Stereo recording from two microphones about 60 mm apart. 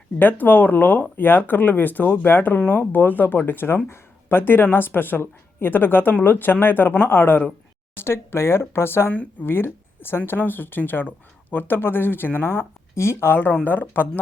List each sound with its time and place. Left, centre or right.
0.2 s speech: left